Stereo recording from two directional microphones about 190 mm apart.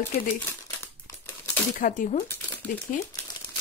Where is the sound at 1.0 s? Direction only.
15° left (ahead or behind).